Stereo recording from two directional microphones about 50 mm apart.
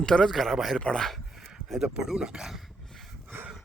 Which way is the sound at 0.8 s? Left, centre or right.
Centre.